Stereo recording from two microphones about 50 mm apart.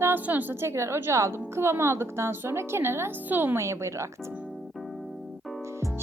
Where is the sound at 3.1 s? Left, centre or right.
Right.